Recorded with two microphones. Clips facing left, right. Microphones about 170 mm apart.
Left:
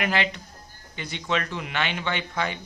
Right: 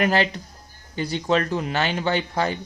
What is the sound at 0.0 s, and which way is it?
Speech, 40° right (ahead or behind).